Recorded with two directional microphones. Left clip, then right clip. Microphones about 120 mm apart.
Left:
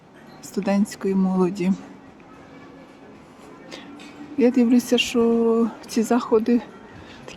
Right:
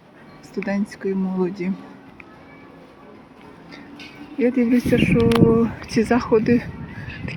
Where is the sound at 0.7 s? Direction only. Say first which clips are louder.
Left 2 dB; 40° left (ahead or behind).